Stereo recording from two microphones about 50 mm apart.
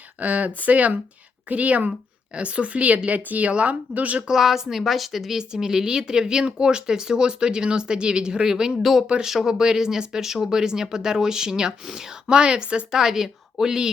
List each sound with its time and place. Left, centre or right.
0.2 s a woman's voice: right
4.3 s a woman's voice: centre
5.4 s speech: centre
8.8 s a woman's voice: centre; by 12.8 s right
12.9 s speech: centre